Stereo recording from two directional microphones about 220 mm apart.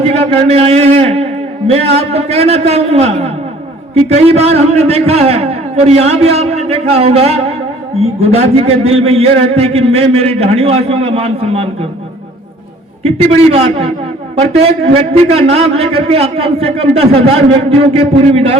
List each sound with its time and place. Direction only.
0.0 s a man's voice: 30° right (ahead or behind)
13.0 s a man's voice: 30° right (ahead or behind)